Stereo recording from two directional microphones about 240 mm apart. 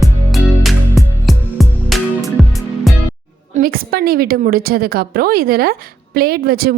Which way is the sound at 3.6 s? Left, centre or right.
Right.